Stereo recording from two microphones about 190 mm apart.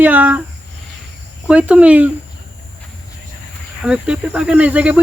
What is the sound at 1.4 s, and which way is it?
Speech, 5° right (ahead or behind).